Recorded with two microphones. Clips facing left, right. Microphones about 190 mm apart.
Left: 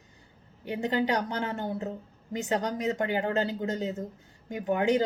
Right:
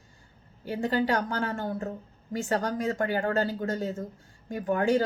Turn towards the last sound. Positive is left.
turn(degrees=20)  # may be behind; listen again after turning